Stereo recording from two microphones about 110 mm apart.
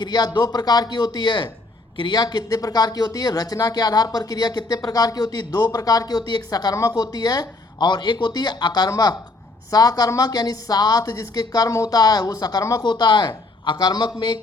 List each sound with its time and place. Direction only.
0.0 s speech: 40° left (ahead or behind)